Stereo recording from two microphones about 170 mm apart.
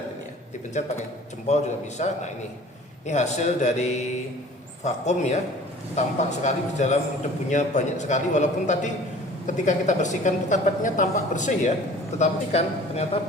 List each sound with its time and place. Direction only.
1.5 s a man's voice: 40° left (ahead or behind)